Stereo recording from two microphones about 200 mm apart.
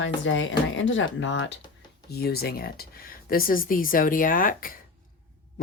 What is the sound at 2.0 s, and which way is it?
Speech, 50° left (ahead or behind).